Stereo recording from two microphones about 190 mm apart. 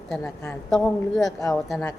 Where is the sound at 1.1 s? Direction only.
20° left (ahead or behind).